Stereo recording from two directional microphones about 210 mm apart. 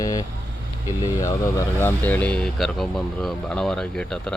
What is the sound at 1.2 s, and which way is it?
Speech, 15° left (ahead or behind).